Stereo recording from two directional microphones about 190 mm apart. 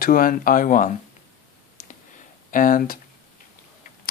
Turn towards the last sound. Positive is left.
turn(degrees=45)  # may be behind; listen again after turning